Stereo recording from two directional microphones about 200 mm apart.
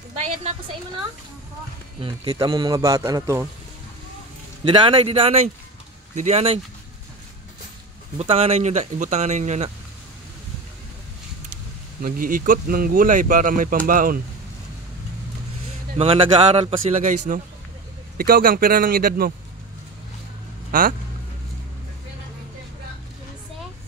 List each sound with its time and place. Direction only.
0.2 s speech: 30° right (ahead or behind)
2.0 s a man's voice: 25° right (ahead or behind)
4.6 s speech: 25° right (ahead or behind)
8.2 s speech: 30° right (ahead or behind)
12.0 s speech: 45° right (ahead or behind)
16.0 s speech: 25° right (ahead or behind); by 19.3 s 45° right (ahead or behind)
20.7 s speech: 45° right (ahead or behind)